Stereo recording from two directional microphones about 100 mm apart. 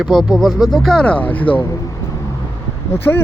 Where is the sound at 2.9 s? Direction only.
25° left (ahead or behind).